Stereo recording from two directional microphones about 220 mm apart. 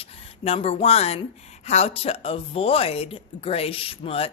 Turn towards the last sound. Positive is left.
turn(degrees=25)  # may be behind; listen again after turning